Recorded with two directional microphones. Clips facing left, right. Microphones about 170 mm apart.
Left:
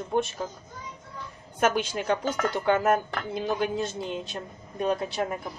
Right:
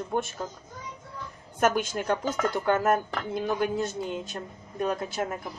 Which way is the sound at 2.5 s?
15° left (ahead or behind).